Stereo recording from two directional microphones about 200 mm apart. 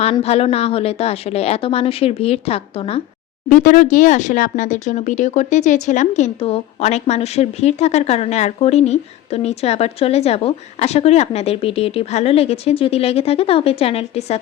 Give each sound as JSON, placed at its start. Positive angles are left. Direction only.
{"t": 0.0, "sound": "speech", "side_deg": 30}
{"t": 3.5, "sound": "speech", "side_deg": 40}